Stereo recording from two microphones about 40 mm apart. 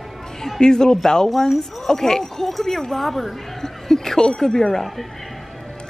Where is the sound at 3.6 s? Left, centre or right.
Centre.